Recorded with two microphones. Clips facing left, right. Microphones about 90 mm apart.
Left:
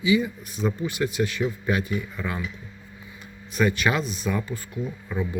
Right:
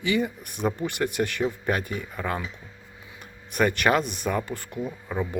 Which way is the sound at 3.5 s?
55° right (ahead or behind).